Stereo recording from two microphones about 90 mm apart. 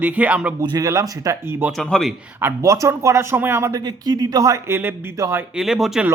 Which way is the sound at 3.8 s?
50° right (ahead or behind).